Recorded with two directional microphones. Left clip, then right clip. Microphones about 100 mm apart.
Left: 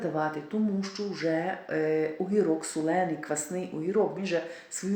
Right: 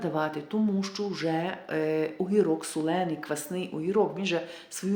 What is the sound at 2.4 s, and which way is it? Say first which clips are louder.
Speech: right 1 dB; 25° right (ahead or behind).